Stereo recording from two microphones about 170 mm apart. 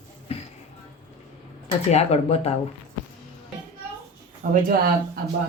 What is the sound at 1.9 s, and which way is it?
Speech, 40° left (ahead or behind).